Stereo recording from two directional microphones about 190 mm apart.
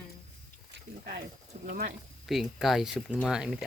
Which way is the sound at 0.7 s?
60° right (ahead or behind).